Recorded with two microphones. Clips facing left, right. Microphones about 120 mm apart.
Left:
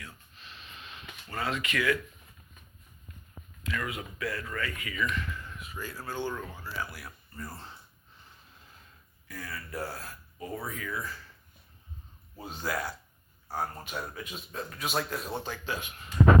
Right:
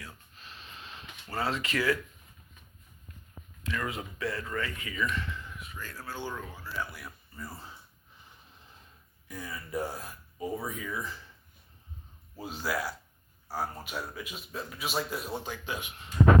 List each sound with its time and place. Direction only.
0.0 s a sound: 30° right (ahead or behind)
3.6 s speech: 30° right (ahead or behind)
5.7 s speech: 5° left (ahead or behind)
9.2 s speech: 15° right (ahead or behind)
12.4 s speech: 5° right (ahead or behind)